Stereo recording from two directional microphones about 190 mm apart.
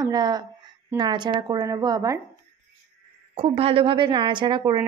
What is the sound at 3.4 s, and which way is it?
Speech, 30° right (ahead or behind).